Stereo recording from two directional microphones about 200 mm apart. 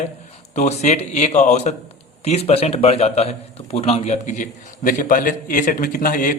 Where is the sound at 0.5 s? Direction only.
35° left (ahead or behind).